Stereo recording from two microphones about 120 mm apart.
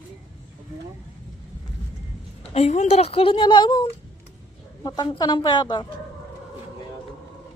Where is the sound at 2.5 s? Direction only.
65° left (ahead or behind); by 5.8 s 35° left (ahead or behind).